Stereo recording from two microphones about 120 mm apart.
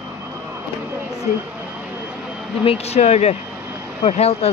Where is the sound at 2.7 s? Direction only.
65° left (ahead or behind).